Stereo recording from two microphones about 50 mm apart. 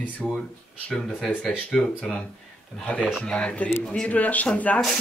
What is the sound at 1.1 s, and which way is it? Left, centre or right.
Speech, centre.